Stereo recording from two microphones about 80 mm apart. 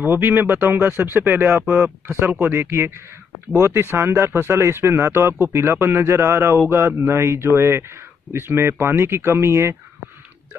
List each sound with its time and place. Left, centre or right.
0.0 s speech: right